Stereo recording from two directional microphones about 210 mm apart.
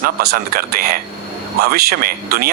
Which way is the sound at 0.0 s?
45° right (ahead or behind).